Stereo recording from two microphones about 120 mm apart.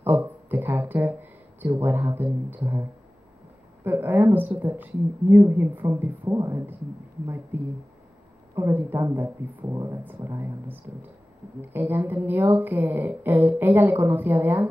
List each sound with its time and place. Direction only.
0.0 s a woman's voice: 15° right (ahead or behind)